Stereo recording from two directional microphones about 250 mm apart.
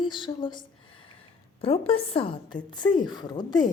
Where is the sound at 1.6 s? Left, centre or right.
Left.